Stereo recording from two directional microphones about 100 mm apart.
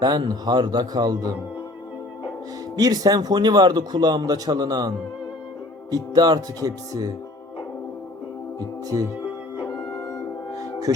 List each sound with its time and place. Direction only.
0.0 s a man's voice: 45° right (ahead or behind)
2.7 s a man's voice: 40° right (ahead or behind)
5.9 s speech: 45° right (ahead or behind)
10.5 s music: 35° right (ahead or behind)